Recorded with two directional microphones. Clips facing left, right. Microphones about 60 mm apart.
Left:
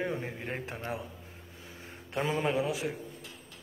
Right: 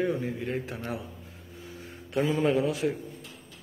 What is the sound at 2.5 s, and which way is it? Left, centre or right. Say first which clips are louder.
Speech: right 5 dB; centre.